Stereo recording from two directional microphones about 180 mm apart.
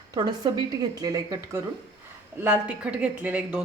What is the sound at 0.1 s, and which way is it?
Speech, 25° right (ahead or behind).